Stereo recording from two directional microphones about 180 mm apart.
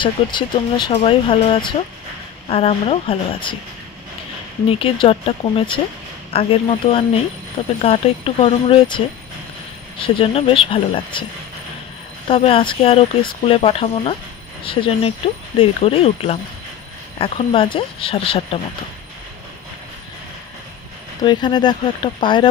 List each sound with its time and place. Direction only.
0.0 s speech: 25° left (ahead or behind)
4.6 s speech: 30° left (ahead or behind)
21.2 s speech: 25° left (ahead or behind)